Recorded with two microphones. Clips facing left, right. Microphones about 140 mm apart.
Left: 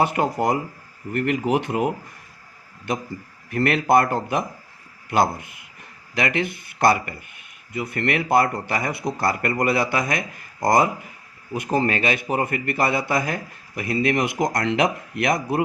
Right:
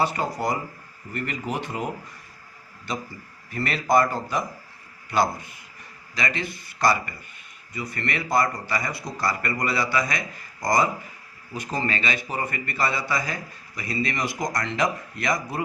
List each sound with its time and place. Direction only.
0.0 s a man's voice: 55° left (ahead or behind)
3.5 s a man's voice: 60° left (ahead or behind)